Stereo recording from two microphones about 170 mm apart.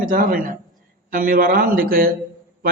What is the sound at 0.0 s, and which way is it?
A man's voice, 55° right (ahead or behind).